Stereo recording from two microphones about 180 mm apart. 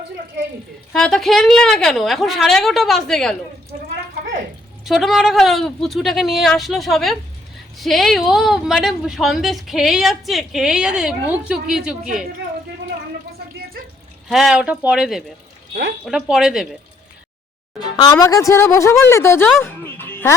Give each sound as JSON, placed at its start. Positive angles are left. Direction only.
{"t": 0.9, "sound": "a woman's voice", "side_deg": 0}
{"t": 4.9, "sound": "a woman's voice", "side_deg": 0}
{"t": 14.3, "sound": "a woman's voice", "side_deg": 0}
{"t": 17.7, "sound": "speech", "side_deg": 25}
{"t": 19.5, "sound": "music", "side_deg": 10}